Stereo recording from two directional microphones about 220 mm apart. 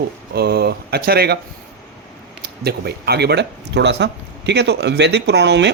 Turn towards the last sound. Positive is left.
turn(degrees=-50)  # may be behind; listen again after turning